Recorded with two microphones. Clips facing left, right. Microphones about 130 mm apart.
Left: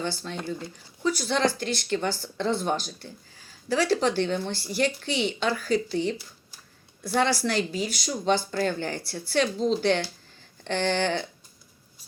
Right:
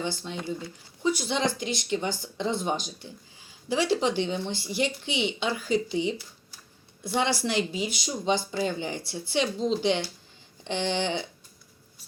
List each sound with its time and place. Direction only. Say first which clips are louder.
0.3 s speech: even; 10° right (ahead or behind)
10.8 s speech: left 3 dB; 50° left (ahead or behind)